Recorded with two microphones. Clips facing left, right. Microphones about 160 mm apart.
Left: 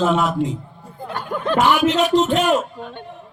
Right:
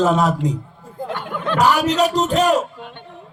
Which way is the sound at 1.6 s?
40° right (ahead or behind).